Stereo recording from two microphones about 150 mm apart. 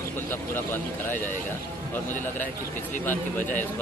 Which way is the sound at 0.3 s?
15° left (ahead or behind).